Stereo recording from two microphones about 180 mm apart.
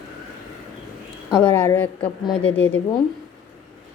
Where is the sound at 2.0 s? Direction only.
30° left (ahead or behind).